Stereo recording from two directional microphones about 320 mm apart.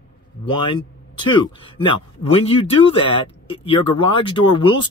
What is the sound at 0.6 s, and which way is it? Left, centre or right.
Speech, centre.